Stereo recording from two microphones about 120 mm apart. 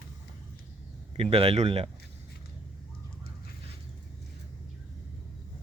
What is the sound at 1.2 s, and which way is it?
Speech, 55° right (ahead or behind).